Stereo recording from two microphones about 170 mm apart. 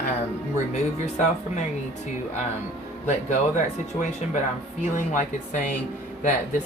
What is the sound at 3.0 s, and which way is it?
Speech, 45° left (ahead or behind).